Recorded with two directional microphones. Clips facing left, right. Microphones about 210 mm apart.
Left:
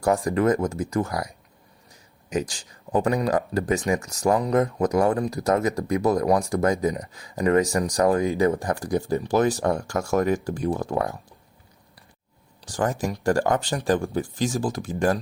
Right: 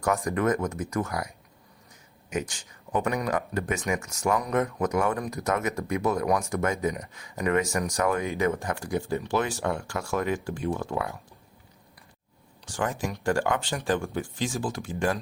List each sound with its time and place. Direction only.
0.0 s speech: 30° left (ahead or behind)
2.3 s speech: 35° left (ahead or behind)
12.6 s speech: 40° left (ahead or behind)